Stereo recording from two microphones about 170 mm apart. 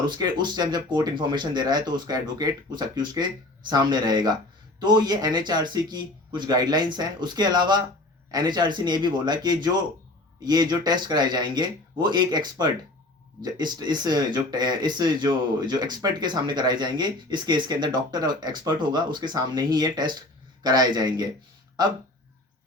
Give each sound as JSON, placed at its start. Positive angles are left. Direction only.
{"t": 0.2, "sound": "speech", "side_deg": -25}